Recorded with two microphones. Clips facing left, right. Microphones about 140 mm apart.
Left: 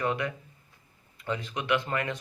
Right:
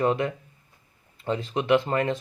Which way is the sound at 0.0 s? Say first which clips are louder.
Right 6 dB; 30° right (ahead or behind).